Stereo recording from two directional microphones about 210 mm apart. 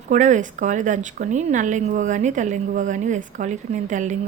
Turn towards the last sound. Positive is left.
turn(degrees=-35)  # may be behind; listen again after turning